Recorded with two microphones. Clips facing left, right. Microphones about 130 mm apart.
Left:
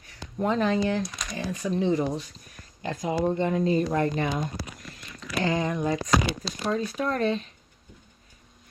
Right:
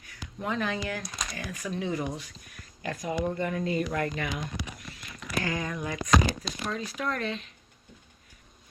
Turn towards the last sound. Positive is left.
turn(degrees=30)  # may be behind; listen again after turning